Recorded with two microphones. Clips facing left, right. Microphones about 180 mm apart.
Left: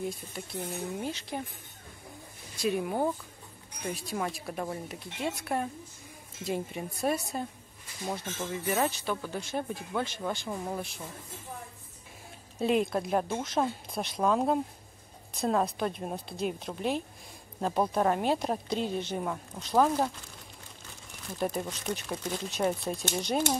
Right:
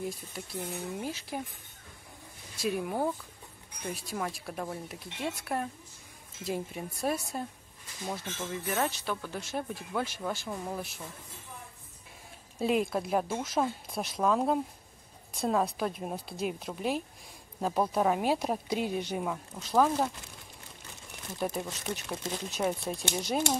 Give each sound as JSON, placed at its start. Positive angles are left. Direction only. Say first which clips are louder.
{"t": 0.4, "sound": "speech", "louder": "left 1 dB", "side_deg": 0}
{"t": 2.5, "sound": "speech", "louder": "left 2 dB", "side_deg": 0}
{"t": 12.5, "sound": "a woman's voice", "louder": "left 1 dB", "side_deg": 0}
{"t": 19.3, "sound": "speech", "louder": "left 1 dB", "side_deg": 5}
{"t": 21.4, "sound": "speech", "louder": "left 2 dB", "side_deg": 0}